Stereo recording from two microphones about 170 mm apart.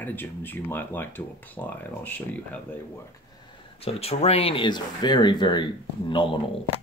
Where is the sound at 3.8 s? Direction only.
35° left (ahead or behind).